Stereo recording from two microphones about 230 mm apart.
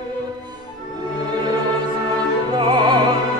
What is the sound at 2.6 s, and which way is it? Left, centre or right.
Music, centre.